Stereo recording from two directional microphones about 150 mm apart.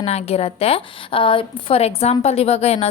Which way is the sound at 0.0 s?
45° left (ahead or behind).